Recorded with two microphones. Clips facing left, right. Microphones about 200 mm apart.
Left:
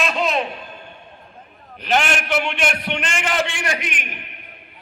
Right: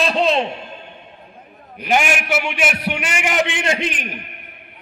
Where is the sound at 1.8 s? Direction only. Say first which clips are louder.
Right 2 dB; 10° right (ahead or behind); by 4.1 s 30° right (ahead or behind).